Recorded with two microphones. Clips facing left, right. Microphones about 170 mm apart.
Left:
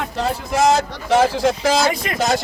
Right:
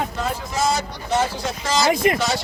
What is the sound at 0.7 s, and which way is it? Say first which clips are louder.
Speech: left 6 dB; 90° left.